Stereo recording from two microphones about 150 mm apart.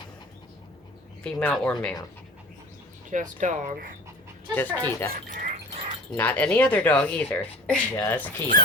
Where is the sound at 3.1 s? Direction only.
60° right (ahead or behind).